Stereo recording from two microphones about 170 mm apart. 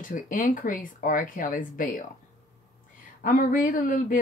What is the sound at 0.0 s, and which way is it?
Speech, 50° left (ahead or behind).